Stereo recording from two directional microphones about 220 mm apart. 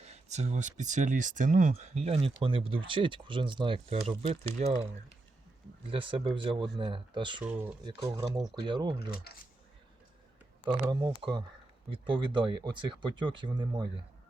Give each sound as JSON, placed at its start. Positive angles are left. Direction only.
{"t": 0.0, "sound": "speech", "side_deg": -30}
{"t": 5.9, "sound": "speech", "side_deg": -25}
{"t": 7.4, "sound": "speech", "side_deg": -10}
{"t": 9.3, "sound": "speech", "side_deg": 45}
{"t": 10.7, "sound": "speech", "side_deg": -20}